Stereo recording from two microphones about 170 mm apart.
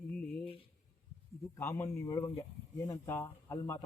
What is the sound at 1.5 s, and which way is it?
Speech, 15° left (ahead or behind).